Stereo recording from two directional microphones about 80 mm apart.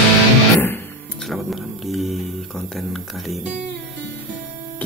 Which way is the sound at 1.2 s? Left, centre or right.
Centre.